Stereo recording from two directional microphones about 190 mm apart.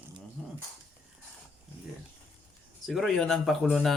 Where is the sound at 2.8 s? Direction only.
Centre (ahead or behind).